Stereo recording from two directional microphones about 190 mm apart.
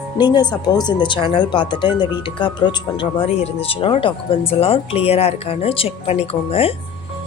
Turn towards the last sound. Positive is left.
turn(degrees=35)  # may be behind; listen again after turning